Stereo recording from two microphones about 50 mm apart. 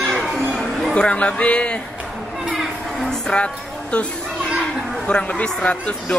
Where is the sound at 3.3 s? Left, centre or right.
Centre.